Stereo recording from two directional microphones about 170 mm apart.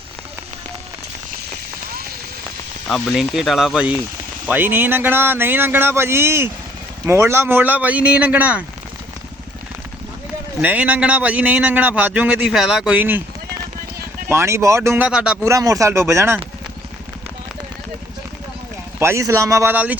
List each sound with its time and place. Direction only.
2.9 s a man's voice: centre (ahead or behind)
10.6 s a man's voice: 10° right (ahead or behind)
14.3 s a man's voice: 15° right (ahead or behind)
15.4 s a man's voice: 20° right (ahead or behind)
18.9 s a man's voice: 15° right (ahead or behind)